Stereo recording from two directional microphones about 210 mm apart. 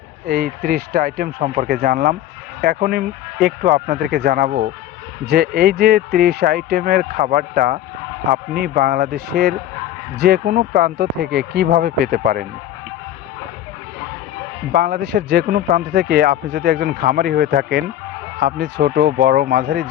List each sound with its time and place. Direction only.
0.3 s speech: 45° right (ahead or behind)
14.8 s speech: 50° right (ahead or behind)